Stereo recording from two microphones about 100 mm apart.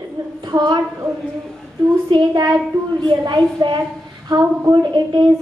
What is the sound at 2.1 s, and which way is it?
Speech, 45° right (ahead or behind).